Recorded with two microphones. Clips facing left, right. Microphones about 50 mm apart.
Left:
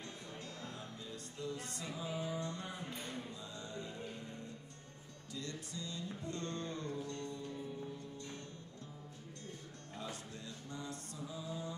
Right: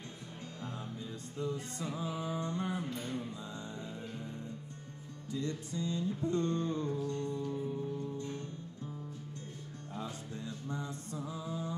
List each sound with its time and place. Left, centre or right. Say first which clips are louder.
1.4 s music: right 6 dB; right
5.3 s music: right 8 dB; right
9.9 s mantra: right 4 dB; right